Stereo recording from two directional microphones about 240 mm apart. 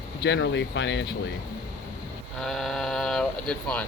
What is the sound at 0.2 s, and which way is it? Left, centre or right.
Speech, left.